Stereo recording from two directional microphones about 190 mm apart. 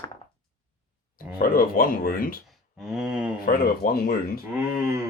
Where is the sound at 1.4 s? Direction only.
50° left (ahead or behind).